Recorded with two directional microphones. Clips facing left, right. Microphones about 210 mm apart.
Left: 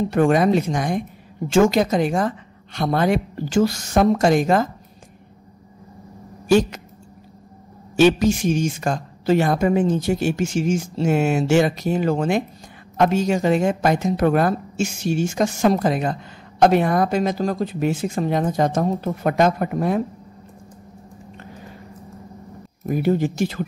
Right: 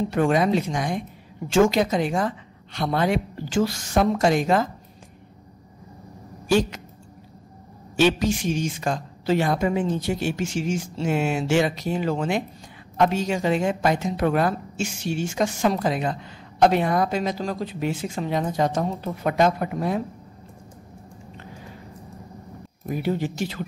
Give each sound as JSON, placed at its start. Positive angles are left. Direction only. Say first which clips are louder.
{"t": 0.1, "sound": "a woman's voice", "louder": "left 4 dB", "side_deg": 45}
{"t": 7.9, "sound": "a woman's voice", "louder": "left 5 dB", "side_deg": 45}
{"t": 22.8, "sound": "a woman's voice", "louder": "left 6 dB", "side_deg": 45}